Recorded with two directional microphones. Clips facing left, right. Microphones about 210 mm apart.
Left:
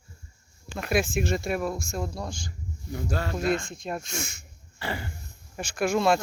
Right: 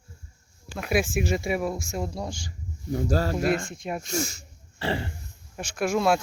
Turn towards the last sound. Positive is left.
turn(degrees=0)  # may be behind; listen again after turning